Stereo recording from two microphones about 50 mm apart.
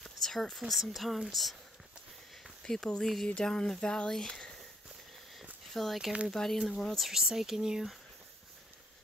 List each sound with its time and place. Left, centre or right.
0.0 s speech: centre
2.6 s speech: centre
5.7 s speech: centre
7.1 s speech: centre